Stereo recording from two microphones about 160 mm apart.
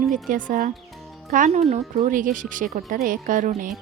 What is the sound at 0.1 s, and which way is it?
Speech, 55° right (ahead or behind).